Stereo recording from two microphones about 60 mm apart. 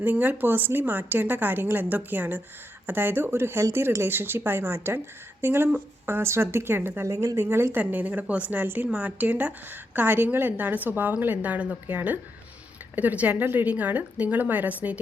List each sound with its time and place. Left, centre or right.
0.0 s a woman's voice: right
7.8 s a woman's voice: right
8.6 s a woman's voice: right
8.9 s a woman's voice: right